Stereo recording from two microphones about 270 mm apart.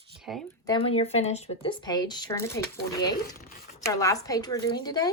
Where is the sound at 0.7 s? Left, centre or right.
Centre.